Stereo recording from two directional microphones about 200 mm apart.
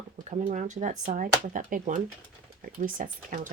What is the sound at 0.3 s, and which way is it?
Speech, 35° right (ahead or behind).